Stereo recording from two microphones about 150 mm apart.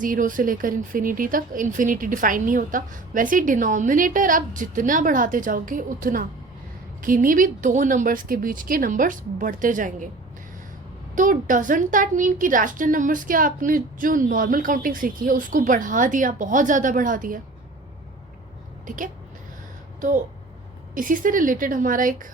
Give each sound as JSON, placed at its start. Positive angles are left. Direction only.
{"t": 0.0, "sound": "a woman's voice", "side_deg": -65}
{"t": 11.1, "sound": "a woman's voice", "side_deg": -60}
{"t": 18.9, "sound": "a woman's voice", "side_deg": -60}